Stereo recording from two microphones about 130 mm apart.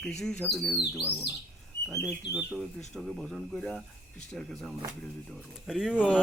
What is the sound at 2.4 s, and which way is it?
Speech, centre (ahead or behind).